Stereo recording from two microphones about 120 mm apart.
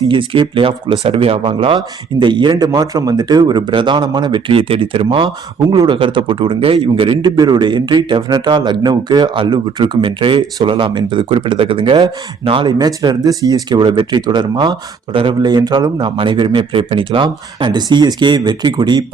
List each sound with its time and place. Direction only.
0.1 s speech: 45° right (ahead or behind)